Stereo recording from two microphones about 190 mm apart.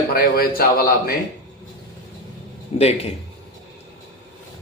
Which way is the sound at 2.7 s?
30° left (ahead or behind).